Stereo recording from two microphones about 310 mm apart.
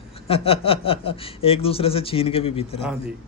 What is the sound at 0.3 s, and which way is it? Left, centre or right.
Speech, centre.